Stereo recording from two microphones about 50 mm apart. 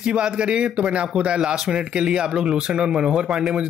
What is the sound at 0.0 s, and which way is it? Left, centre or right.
Speech, centre.